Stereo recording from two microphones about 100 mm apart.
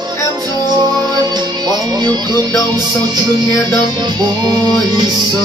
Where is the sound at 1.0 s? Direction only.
40° right (ahead or behind).